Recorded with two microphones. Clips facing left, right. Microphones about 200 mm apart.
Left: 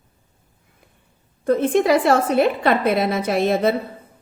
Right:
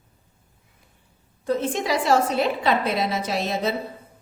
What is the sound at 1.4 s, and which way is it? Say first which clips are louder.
A woman's voice: left 7 dB; 55° left (ahead or behind).